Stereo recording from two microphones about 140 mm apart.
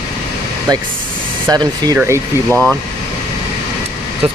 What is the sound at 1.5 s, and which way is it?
Speech, 30° right (ahead or behind).